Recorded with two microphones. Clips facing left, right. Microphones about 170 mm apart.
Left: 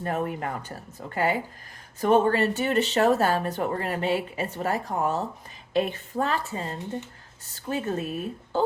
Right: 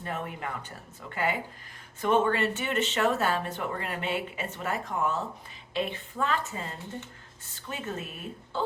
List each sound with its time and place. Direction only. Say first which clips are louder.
0.0 s speech: left 7 dB; 40° left (ahead or behind)